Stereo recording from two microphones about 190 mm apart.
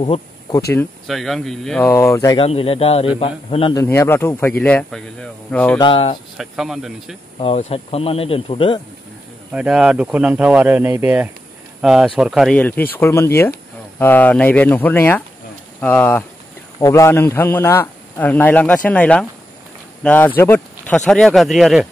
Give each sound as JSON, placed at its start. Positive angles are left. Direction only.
{"t": 0.0, "sound": "speech", "side_deg": 25}
{"t": 1.0, "sound": "speech", "side_deg": 0}
{"t": 1.9, "sound": "a man's voice", "side_deg": 15}
{"t": 2.4, "sound": "a man's voice", "side_deg": 30}
{"t": 3.7, "sound": "a man's voice", "side_deg": 15}
{"t": 5.8, "sound": "a man's voice", "side_deg": 25}
{"t": 6.3, "sound": "speech", "side_deg": 0}
{"t": 7.3, "sound": "a man's voice", "side_deg": 30}
{"t": 9.5, "sound": "a man's voice", "side_deg": -5}